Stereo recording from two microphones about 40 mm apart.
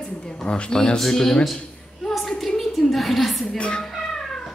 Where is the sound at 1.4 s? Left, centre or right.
Centre.